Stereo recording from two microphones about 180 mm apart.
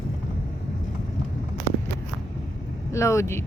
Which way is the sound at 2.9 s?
15° left (ahead or behind).